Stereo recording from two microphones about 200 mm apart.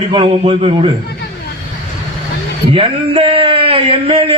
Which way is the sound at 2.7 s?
25° right (ahead or behind).